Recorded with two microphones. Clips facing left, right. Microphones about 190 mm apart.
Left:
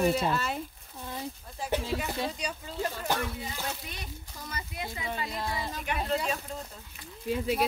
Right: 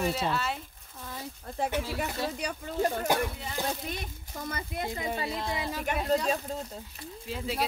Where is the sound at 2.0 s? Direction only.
55° right (ahead or behind).